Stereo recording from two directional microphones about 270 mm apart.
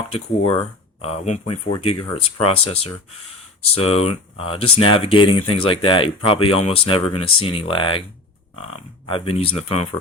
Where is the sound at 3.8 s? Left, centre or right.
Left.